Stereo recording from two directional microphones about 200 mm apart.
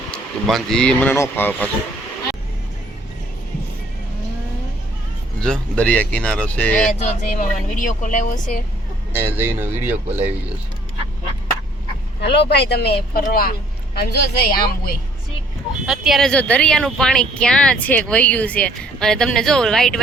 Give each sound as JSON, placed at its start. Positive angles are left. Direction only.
{"t": 0.1, "sound": "speech", "side_deg": 0}
{"t": 5.4, "sound": "speech", "side_deg": 5}
{"t": 7.0, "sound": "speech", "side_deg": 40}
{"t": 9.1, "sound": "speech", "side_deg": -10}
{"t": 12.2, "sound": "speech", "side_deg": 60}
{"t": 15.9, "sound": "speech", "side_deg": 0}